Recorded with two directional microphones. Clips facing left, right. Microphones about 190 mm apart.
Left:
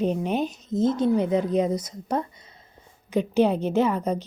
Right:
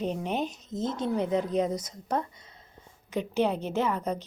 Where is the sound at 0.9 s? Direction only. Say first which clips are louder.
Left 6 dB; 5° left (ahead or behind).